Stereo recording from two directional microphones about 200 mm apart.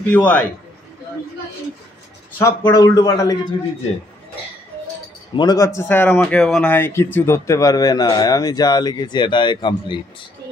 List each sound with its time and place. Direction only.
0.1 s speech: 5° left (ahead or behind)
2.3 s speech: 15° left (ahead or behind)
5.3 s speech: 20° left (ahead or behind)